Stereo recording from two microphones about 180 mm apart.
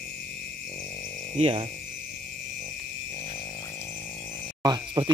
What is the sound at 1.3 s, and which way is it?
Speech, 35° right (ahead or behind).